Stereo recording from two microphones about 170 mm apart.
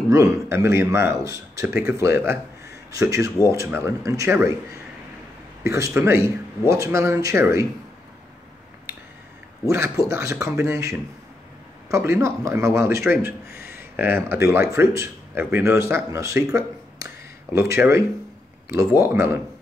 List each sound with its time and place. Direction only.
0.1 s speech: 20° right (ahead or behind)
5.6 s speech: 15° right (ahead or behind)
9.7 s speech: 15° right (ahead or behind)
13.6 s a sound: 65° left (ahead or behind)
13.9 s speech: 10° right (ahead or behind)